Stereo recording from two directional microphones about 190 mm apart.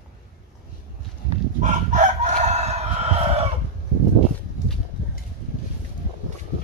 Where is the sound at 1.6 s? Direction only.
40° right (ahead or behind).